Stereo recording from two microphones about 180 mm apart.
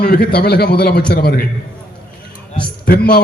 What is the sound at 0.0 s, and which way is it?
A man's voice, 60° left (ahead or behind).